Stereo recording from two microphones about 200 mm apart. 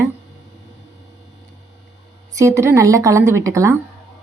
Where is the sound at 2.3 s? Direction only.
15° right (ahead or behind).